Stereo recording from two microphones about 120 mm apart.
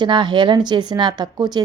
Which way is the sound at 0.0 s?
40° right (ahead or behind).